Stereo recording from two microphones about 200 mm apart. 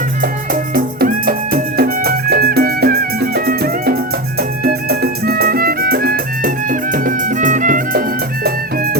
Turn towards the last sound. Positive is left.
turn(degrees=-40)  # may be behind; listen again after turning